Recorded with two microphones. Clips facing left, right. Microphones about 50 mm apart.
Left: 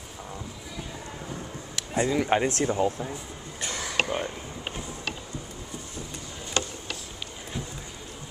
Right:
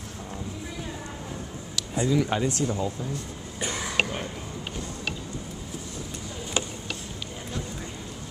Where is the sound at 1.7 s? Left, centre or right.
Left.